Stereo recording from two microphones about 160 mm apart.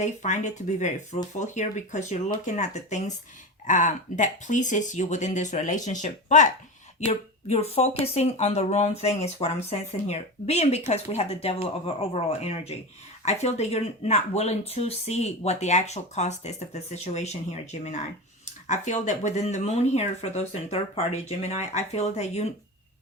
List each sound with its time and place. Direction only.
0.0 s speech: 50° left (ahead or behind)